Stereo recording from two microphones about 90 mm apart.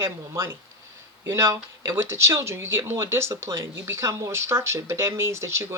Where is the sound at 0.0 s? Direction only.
30° right (ahead or behind).